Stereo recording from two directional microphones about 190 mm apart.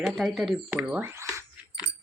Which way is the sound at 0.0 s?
Centre (ahead or behind).